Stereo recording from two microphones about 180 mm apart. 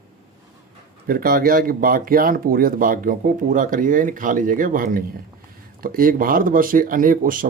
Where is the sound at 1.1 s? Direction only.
55° right (ahead or behind).